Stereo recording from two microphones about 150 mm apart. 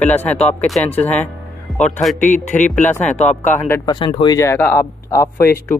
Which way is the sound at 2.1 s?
55° left (ahead or behind).